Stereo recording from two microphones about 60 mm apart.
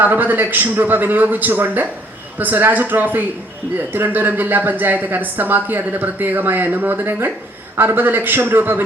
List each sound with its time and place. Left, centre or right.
0.0 s speech: right